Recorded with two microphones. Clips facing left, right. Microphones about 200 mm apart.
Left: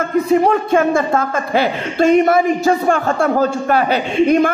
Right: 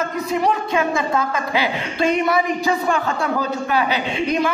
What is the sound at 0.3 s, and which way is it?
Speech, 50° left (ahead or behind).